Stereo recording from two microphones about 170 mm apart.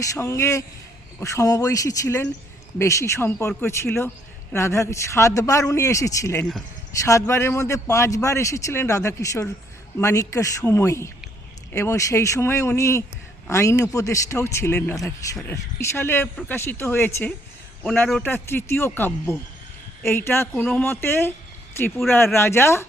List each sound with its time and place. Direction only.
0.0 s a man's voice: 20° left (ahead or behind)